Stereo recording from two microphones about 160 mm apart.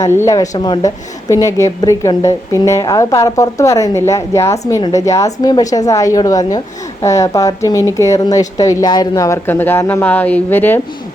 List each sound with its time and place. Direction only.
0.0 s a woman's voice: 15° left (ahead or behind)